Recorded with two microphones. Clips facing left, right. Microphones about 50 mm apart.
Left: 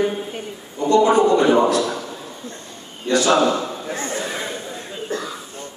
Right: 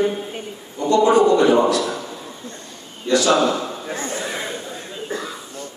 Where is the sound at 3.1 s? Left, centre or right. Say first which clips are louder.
Even; left.